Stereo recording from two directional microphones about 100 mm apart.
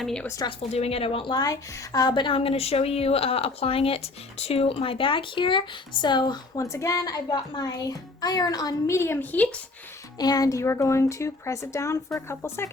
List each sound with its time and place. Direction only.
0.0 s speech: 5° left (ahead or behind)
0.7 s speech: 90° left; by 1.3 s 70° left (ahead or behind)
1.3 s a woman's voice: 40° left (ahead or behind)
2.4 s speech: 90° left; by 6.4 s 50° left (ahead or behind)
6.6 s speech: 30° left (ahead or behind)
9.0 s a woman's voice: 25° left (ahead or behind)
10.2 s speech: 40° left (ahead or behind)